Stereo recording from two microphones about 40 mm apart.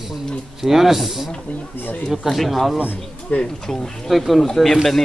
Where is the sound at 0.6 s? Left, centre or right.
Centre.